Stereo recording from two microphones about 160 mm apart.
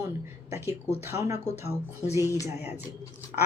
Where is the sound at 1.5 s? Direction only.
45° left (ahead or behind).